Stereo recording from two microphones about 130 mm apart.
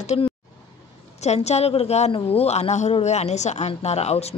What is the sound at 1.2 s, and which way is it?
Speech, 55° left (ahead or behind).